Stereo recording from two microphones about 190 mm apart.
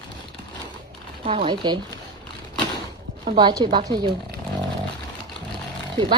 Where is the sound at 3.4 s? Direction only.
20° right (ahead or behind).